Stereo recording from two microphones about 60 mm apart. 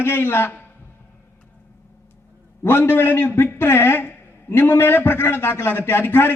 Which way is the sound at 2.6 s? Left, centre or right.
Left.